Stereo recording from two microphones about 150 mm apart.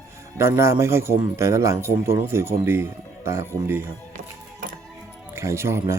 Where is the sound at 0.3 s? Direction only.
20° right (ahead or behind).